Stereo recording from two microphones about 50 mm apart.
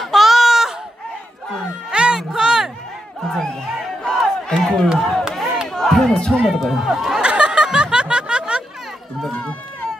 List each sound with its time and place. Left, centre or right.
0.0 s a sound: centre
1.9 s music: centre
3.2 s crowd: centre
4.6 s a sound: centre
5.7 s crowd: centre
6.4 s speech: centre
7.2 s snicker: centre
9.4 s run: left